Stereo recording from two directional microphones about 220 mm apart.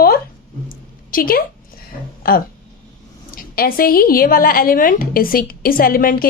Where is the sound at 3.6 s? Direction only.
40° left (ahead or behind).